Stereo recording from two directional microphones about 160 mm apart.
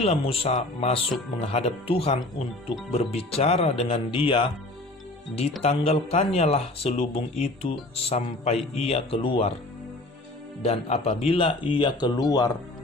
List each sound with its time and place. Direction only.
0.0 s speech: 35° left (ahead or behind)
5.6 s speech: 35° left (ahead or behind)
10.6 s speech: 40° left (ahead or behind); by 12.5 s 25° left (ahead or behind)